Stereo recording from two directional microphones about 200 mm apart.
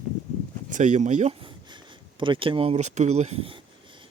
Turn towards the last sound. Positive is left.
turn(degrees=-30)  # may be behind; listen again after turning